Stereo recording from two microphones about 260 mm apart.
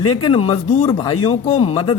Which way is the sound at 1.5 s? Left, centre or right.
Left.